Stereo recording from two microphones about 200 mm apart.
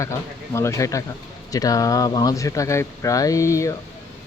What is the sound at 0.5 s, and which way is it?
Speech, 15° left (ahead or behind).